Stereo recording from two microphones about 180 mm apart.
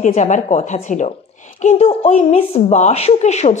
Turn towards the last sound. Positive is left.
turn(degrees=40)  # may be behind; listen again after turning